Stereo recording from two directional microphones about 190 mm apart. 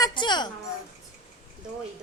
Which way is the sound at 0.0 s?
25° left (ahead or behind).